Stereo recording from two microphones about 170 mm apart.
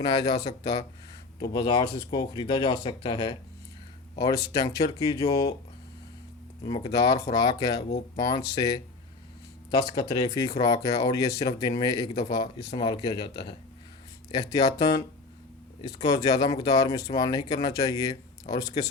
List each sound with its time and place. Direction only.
0.0 s speech: 25° left (ahead or behind)
6.6 s speech: 25° left (ahead or behind)
9.9 s speech: 25° left (ahead or behind)